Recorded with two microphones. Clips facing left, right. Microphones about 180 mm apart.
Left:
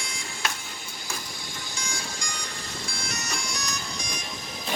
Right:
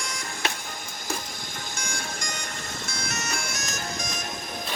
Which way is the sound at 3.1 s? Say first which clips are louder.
Right 5 dB; 55° right (ahead or behind).